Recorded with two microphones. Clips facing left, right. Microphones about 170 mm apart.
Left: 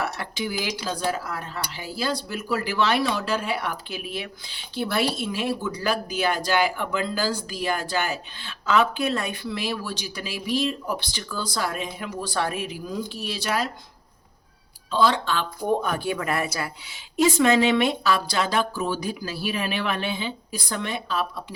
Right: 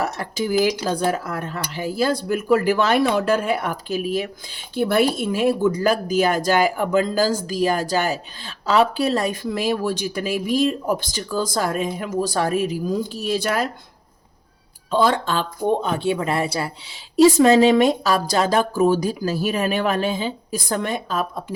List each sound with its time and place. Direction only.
0.0 s speech: 40° right (ahead or behind)
14.8 s speech: 50° right (ahead or behind)
15.6 s speech: 25° right (ahead or behind); by 21.2 s 45° right (ahead or behind)